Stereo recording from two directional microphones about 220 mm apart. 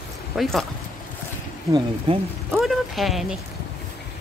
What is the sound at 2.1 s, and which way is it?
Speech, 25° right (ahead or behind).